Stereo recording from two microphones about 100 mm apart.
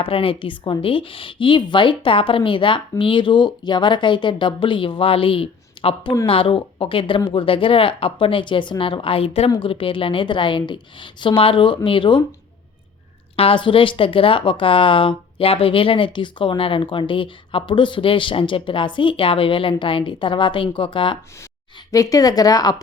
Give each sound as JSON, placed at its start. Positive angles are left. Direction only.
{"t": 0.0, "sound": "speech", "side_deg": 65}
{"t": 9.5, "sound": "speech", "side_deg": 60}
{"t": 13.3, "sound": "speech", "side_deg": 65}
{"t": 21.9, "sound": "speech", "side_deg": 35}